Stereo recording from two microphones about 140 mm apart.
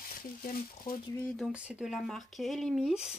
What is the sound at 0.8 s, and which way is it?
Speech, 35° left (ahead or behind).